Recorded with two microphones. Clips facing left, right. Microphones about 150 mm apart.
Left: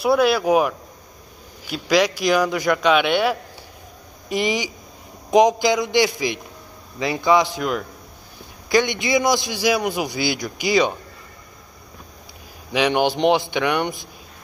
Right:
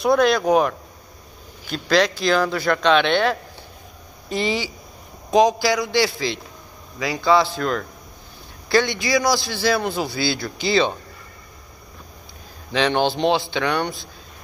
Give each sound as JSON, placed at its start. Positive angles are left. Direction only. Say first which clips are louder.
{"t": 0.0, "sound": "a man's voice", "louder": "even", "side_deg": 10}
{"t": 12.7, "sound": "a man's voice", "louder": "left 1 dB", "side_deg": 15}